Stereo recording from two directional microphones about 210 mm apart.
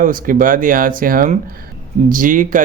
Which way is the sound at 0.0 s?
40° right (ahead or behind).